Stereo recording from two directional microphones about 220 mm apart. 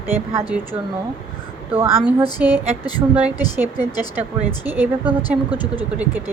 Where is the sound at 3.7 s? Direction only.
15° left (ahead or behind).